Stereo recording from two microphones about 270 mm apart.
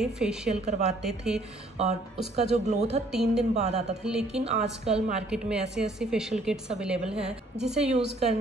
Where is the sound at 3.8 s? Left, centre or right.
Centre.